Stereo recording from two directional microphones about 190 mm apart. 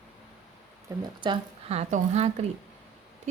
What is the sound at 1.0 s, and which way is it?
Speech, 25° right (ahead or behind).